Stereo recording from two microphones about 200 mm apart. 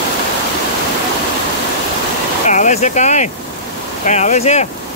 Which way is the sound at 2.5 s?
40° left (ahead or behind).